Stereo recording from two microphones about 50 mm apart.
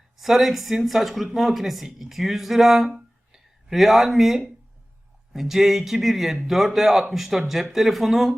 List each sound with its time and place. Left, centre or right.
0.2 s speech: centre
2.9 s music: centre
5.3 s speech: centre